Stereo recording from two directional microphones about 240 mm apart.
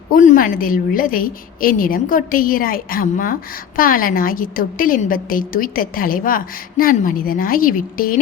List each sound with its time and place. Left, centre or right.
0.1 s a woman's voice: left